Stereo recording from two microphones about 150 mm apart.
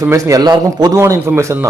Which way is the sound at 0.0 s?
20° right (ahead or behind).